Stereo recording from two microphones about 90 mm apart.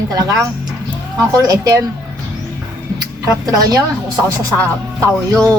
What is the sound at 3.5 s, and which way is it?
Speech, 45° right (ahead or behind).